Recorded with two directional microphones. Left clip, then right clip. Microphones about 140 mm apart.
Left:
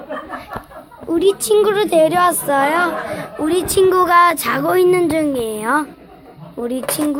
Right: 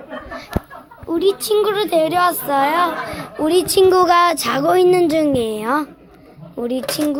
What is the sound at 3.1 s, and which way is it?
A woman's voice, 15° right (ahead or behind).